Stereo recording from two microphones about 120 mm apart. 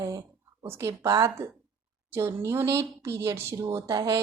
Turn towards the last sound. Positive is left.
turn(degrees=-30)  # may be behind; listen again after turning